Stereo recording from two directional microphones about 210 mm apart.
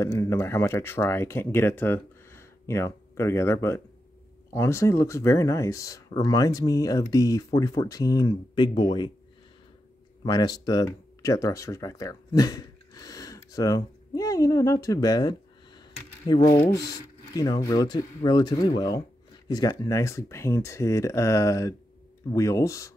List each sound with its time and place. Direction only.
0.0 s speech: 15° left (ahead or behind)
10.2 s speech: 20° left (ahead or behind)